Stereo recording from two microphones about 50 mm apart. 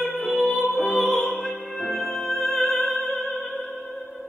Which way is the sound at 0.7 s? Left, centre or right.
Left.